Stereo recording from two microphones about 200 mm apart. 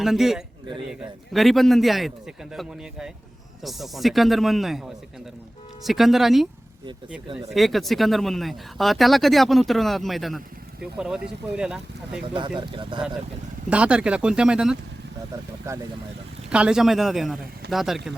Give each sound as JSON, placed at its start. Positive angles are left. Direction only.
{"t": 0.0, "sound": "speech", "side_deg": 0}
{"t": 7.5, "sound": "speech", "side_deg": 0}
{"t": 12.3, "sound": "speech", "side_deg": -25}
{"t": 13.7, "sound": "speech", "side_deg": -5}
{"t": 15.7, "sound": "speech", "side_deg": -15}